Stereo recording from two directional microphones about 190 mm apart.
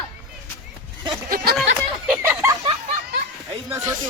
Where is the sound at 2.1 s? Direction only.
10° right (ahead or behind).